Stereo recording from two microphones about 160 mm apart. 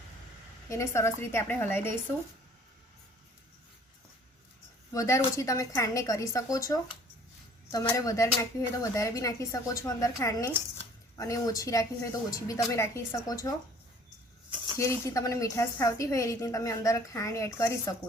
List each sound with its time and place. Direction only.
0.7 s a woman's voice: 15° left (ahead or behind)
4.9 s a woman's voice: 20° left (ahead or behind)
14.8 s a woman's voice: 20° left (ahead or behind)